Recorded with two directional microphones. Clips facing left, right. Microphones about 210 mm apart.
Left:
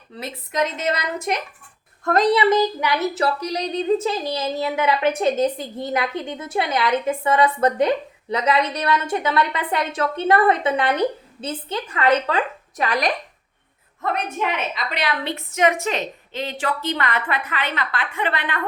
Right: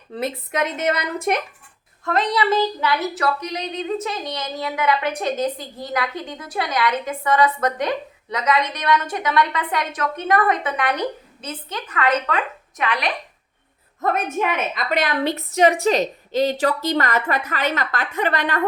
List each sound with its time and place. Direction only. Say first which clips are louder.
0.2 s a woman's voice: right 1 dB; 55° right (ahead or behind)
2.3 s speech: left 3 dB; 20° left (ahead or behind); by 13.1 s 40° left (ahead or behind)
14.0 s a woman's voice: right 3 dB; 45° right (ahead or behind)